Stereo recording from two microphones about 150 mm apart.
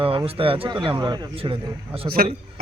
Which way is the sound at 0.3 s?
40° right (ahead or behind).